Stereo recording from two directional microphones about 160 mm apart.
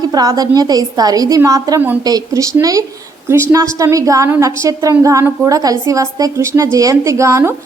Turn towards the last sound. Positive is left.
turn(degrees=-20)  # may be behind; listen again after turning